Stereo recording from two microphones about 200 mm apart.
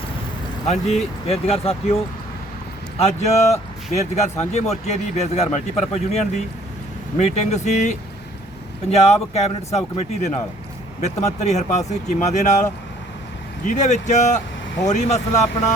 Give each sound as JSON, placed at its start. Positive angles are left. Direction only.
{"t": 0.7, "sound": "speech", "side_deg": 35}
{"t": 3.0, "sound": "speech", "side_deg": 35}
{"t": 13.7, "sound": "speech", "side_deg": 35}